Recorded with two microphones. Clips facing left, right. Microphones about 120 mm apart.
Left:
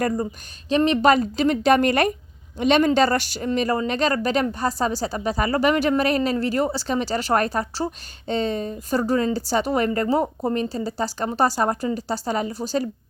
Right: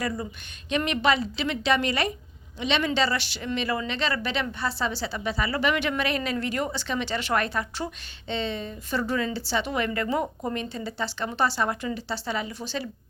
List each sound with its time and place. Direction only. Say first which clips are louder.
0.0 s speech: left 7 dB; 40° left (ahead or behind)
1.1 s a woman's voice: left 7 dB; 45° left (ahead or behind)